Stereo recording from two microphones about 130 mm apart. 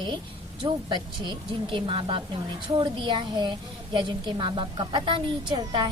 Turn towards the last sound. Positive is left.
turn(degrees=-35)  # may be behind; listen again after turning